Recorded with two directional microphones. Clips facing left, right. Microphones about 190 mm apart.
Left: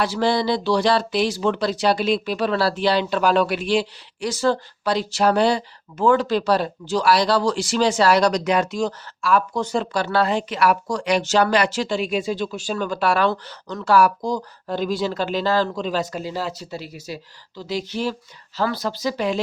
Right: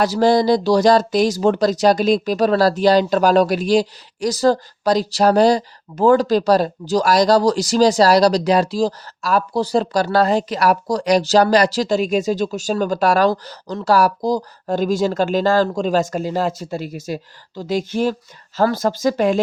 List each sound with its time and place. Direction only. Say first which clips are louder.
0.0 s speech: right 6 dB; 40° right (ahead or behind)